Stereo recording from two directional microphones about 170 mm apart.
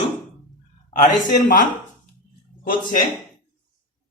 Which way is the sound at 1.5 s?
50° left (ahead or behind).